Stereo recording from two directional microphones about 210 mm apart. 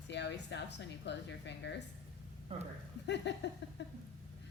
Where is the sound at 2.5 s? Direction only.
30° right (ahead or behind).